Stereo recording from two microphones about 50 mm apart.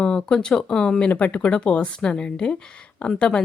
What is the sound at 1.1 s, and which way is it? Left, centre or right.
A woman's voice, left.